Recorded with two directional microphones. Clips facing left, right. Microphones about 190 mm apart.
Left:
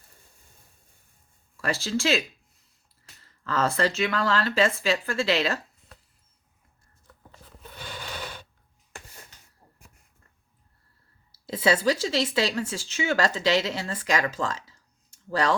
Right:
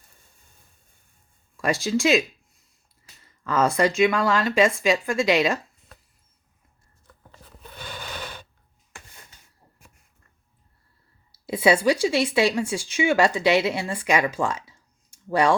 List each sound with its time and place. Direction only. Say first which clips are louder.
1.6 s speech: right 5 dB; 15° right (ahead or behind)
11.4 s speech: right 4 dB; 15° right (ahead or behind)